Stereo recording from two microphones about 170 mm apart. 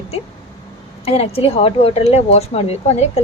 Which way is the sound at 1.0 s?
35° left (ahead or behind).